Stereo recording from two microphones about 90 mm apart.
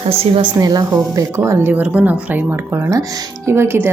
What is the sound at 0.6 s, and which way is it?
Speech, 45° right (ahead or behind).